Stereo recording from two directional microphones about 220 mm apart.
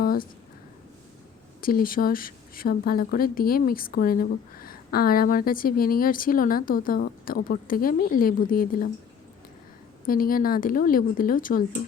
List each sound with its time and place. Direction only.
0.0 s a sound: 40° left (ahead or behind)
1.6 s speech: 40° left (ahead or behind)
10.1 s speech: 40° left (ahead or behind)